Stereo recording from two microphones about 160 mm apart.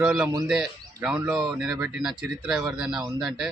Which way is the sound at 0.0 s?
5° right (ahead or behind).